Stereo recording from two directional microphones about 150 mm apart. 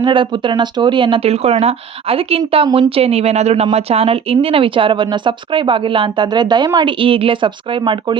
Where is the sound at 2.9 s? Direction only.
45° right (ahead or behind).